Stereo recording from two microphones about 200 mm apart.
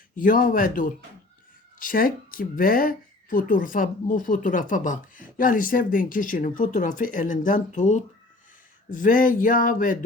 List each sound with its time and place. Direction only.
0.2 s speech: 45° left (ahead or behind)